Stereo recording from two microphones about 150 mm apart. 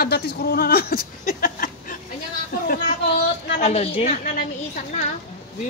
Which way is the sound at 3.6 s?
45° left (ahead or behind).